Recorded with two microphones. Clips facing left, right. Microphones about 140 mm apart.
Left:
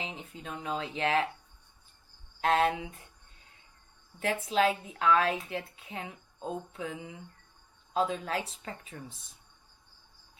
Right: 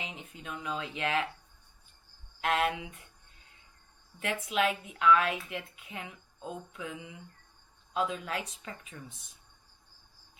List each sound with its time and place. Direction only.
0.0 s a woman's voice: 30° left (ahead or behind)
2.4 s a woman's voice: 30° left (ahead or behind)
4.2 s a woman's voice: 30° left (ahead or behind)